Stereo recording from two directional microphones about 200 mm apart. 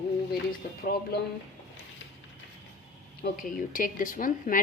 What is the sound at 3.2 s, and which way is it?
A woman's voice, 45° left (ahead or behind).